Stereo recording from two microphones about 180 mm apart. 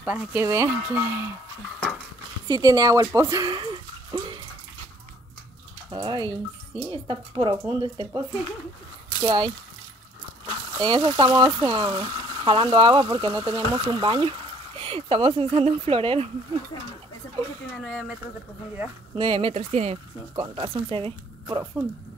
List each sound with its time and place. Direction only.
0.0 s speech: 5° right (ahead or behind)
2.4 s speech: 20° right (ahead or behind)
5.9 s speech: 25° right (ahead or behind)
9.2 s speech: 25° right (ahead or behind)
17.7 s speech: centre (ahead or behind)
19.1 s speech: 30° right (ahead or behind)